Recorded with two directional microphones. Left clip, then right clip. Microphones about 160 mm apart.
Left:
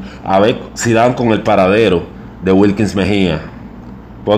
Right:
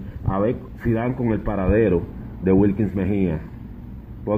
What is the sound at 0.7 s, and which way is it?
Speech, 15° left (ahead or behind).